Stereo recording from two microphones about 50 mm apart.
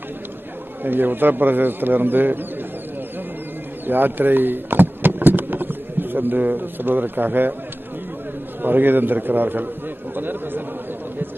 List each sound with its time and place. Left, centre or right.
0.8 s a man's voice: right
3.8 s speech: right
8.6 s a man's voice: right